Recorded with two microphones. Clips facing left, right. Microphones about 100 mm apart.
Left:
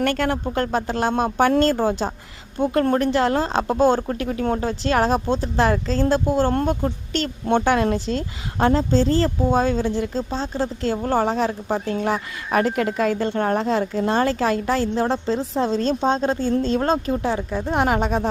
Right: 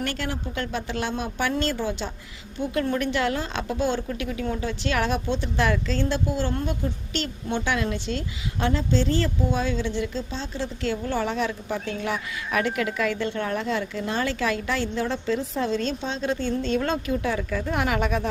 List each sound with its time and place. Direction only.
0.0 s a woman's voice: 50° left (ahead or behind); by 18.3 s 35° left (ahead or behind)